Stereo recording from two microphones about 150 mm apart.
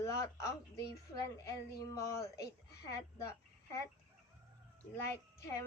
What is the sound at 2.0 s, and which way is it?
Speech, 20° left (ahead or behind).